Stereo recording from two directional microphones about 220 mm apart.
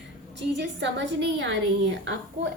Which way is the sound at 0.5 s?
55° right (ahead or behind).